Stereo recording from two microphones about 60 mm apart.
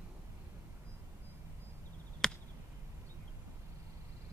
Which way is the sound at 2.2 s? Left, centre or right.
Centre.